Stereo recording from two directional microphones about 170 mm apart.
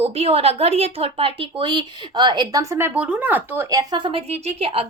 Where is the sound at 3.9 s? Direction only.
30° right (ahead or behind).